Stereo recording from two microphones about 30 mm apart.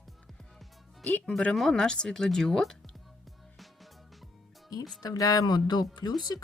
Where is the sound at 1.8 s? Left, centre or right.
Left.